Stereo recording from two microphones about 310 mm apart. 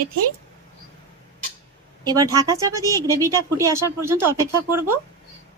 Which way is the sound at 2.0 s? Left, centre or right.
Centre.